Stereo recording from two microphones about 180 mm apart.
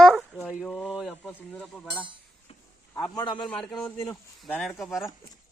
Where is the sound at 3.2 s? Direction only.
25° left (ahead or behind).